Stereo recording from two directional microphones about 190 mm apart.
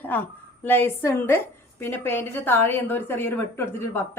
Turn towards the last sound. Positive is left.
turn(degrees=10)  # may be behind; listen again after turning